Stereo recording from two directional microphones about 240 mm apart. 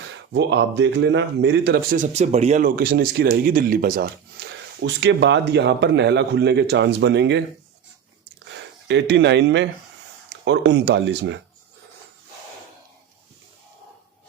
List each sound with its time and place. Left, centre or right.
0.3 s speech: right
8.9 s speech: right